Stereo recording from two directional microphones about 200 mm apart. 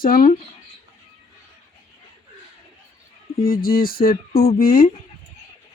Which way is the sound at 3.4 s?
45° left (ahead or behind).